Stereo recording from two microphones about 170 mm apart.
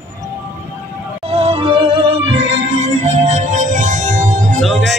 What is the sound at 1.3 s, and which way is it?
Music, 35° right (ahead or behind).